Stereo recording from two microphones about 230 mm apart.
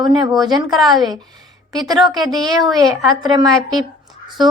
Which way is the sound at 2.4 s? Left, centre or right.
Centre.